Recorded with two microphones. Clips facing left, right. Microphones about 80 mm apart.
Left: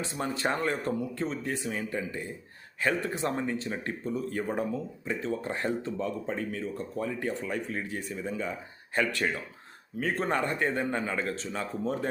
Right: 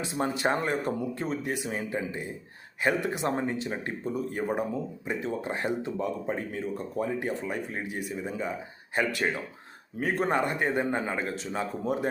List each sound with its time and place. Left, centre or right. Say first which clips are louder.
0.2 s speech: right 3 dB; right
6.3 s speech: right 1 dB; right